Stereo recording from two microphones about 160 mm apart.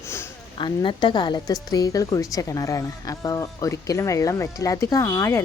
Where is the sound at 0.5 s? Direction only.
30° left (ahead or behind).